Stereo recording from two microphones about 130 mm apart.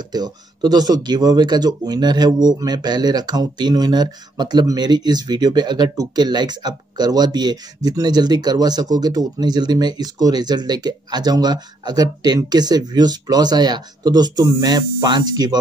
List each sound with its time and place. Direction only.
0.1 s speech: 30° right (ahead or behind)